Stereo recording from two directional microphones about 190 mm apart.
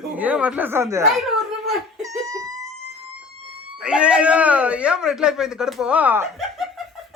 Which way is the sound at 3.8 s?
5° right (ahead or behind).